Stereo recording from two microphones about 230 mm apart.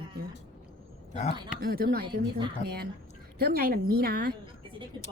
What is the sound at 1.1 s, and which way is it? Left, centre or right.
Speech, left.